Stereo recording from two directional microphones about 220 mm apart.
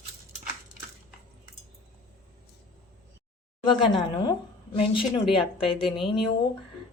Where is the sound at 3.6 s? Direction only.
20° left (ahead or behind).